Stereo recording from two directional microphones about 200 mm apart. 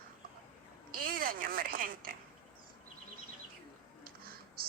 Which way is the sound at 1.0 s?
45° right (ahead or behind).